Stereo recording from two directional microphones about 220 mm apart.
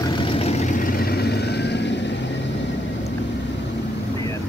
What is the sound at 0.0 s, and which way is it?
Vehicle, 20° left (ahead or behind).